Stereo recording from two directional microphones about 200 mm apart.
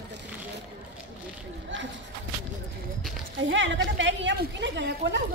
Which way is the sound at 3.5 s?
65° right (ahead or behind).